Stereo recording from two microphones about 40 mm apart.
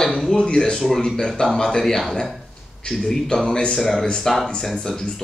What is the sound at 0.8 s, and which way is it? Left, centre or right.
A man's voice, centre.